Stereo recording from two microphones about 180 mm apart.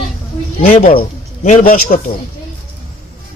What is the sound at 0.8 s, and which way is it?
Speech, 45° left (ahead or behind).